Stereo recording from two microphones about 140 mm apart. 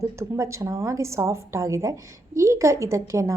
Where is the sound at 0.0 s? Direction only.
20° right (ahead or behind).